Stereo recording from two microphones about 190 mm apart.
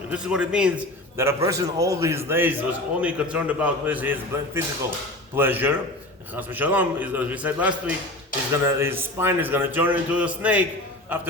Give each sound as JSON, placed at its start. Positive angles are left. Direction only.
{"t": 0.1, "sound": "a man's voice", "side_deg": -5}